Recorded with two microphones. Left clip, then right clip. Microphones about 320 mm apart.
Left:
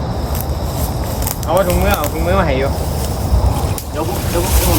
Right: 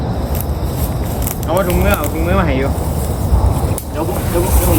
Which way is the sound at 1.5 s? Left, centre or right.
Left.